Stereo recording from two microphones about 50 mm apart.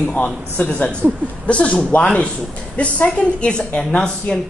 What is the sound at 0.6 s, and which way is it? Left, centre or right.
Speech, left.